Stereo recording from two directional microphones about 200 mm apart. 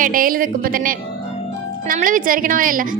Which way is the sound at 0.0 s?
45° right (ahead or behind).